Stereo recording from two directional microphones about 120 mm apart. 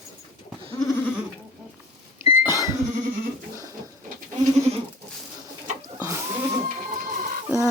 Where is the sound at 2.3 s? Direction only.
30° right (ahead or behind).